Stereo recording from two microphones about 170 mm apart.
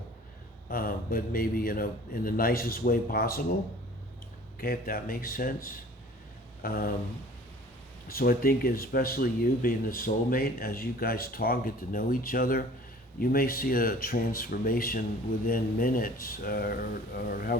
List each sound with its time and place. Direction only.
0.7 s speech: 60° left (ahead or behind)
4.6 s speech: 60° left (ahead or behind)
8.0 s speech: 60° left (ahead or behind)